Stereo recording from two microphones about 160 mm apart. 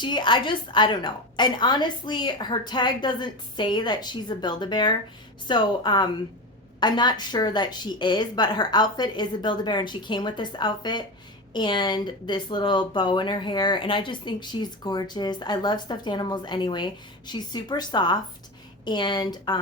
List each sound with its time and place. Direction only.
0.0 s speech: 30° left (ahead or behind)